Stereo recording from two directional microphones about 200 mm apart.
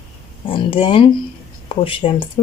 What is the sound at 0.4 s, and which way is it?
Speech, 25° left (ahead or behind).